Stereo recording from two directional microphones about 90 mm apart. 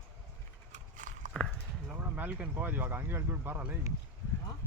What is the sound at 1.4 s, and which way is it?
Clip-clop, 5° left (ahead or behind).